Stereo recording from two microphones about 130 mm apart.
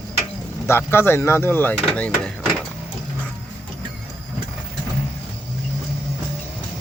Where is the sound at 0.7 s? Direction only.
15° left (ahead or behind).